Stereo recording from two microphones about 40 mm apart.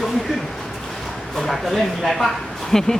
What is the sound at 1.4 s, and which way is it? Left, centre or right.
Speech, centre.